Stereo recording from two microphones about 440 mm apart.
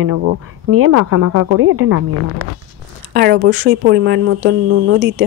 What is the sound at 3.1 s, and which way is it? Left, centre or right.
Speech, right.